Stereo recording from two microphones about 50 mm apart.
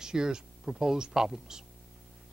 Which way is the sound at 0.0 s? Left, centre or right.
Centre.